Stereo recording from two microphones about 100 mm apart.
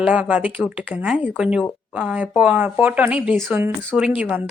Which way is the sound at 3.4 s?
20° right (ahead or behind).